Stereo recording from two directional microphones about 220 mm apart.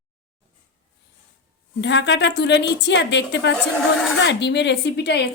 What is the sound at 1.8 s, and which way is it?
A woman's voice, 55° left (ahead or behind).